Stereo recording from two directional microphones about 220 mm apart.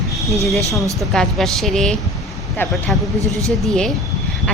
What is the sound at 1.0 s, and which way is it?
Speech, centre (ahead or behind).